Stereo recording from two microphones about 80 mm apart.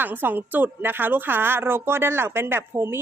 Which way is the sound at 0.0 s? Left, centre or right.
Right.